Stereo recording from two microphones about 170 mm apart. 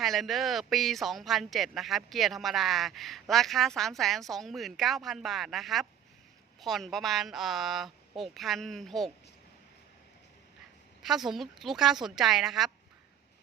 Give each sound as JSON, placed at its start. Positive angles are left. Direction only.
{"t": 0.0, "sound": "speech", "side_deg": 0}
{"t": 11.0, "sound": "speech", "side_deg": 0}